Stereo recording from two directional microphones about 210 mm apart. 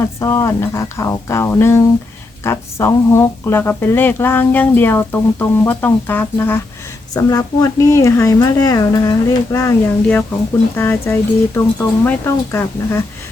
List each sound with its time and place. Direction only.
0.2 s speech: 15° left (ahead or behind)